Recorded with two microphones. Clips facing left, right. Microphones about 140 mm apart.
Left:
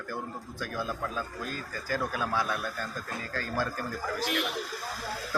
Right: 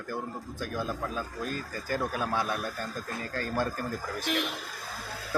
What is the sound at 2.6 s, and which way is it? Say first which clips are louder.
Speech: right 1 dB; 35° right (ahead or behind).